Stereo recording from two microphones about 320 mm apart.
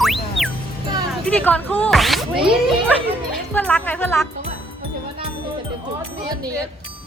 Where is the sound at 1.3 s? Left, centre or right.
Centre.